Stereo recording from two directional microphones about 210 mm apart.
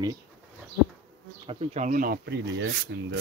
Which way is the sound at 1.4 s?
25° right (ahead or behind).